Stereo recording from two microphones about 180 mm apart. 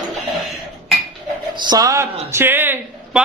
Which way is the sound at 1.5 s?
25° right (ahead or behind).